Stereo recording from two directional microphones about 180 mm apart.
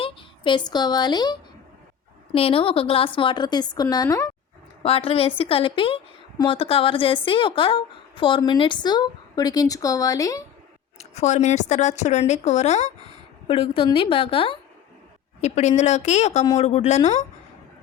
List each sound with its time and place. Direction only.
0.0 s a woman's voice: 30° left (ahead or behind)
4.8 s a woman's voice: 30° left (ahead or behind)
10.9 s speech: 40° left (ahead or behind)